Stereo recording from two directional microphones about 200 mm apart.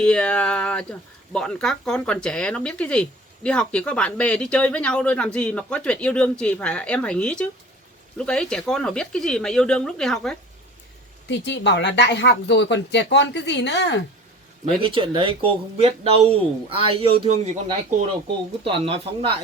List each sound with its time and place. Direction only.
0.0 s speech: 5° left (ahead or behind)
11.3 s speech: 60° left (ahead or behind)
14.6 s speech: 25° right (ahead or behind)